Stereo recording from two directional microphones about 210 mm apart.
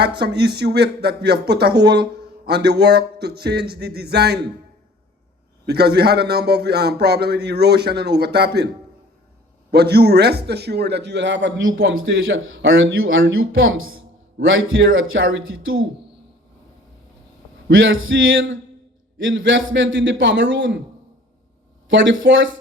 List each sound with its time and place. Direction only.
0.0 s a man's voice: 50° right (ahead or behind)
5.6 s a man's voice: 50° right (ahead or behind)
9.7 s a man's voice: 50° right (ahead or behind); by 15.9 s 70° right (ahead or behind)
17.7 s a man's voice: 65° right (ahead or behind)
21.8 s a man's voice: 65° right (ahead or behind)